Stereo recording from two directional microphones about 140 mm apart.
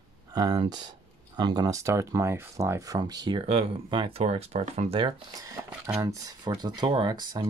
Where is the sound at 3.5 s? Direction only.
40° right (ahead or behind).